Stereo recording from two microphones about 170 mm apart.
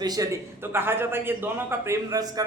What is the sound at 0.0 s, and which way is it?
A man's voice, 20° right (ahead or behind).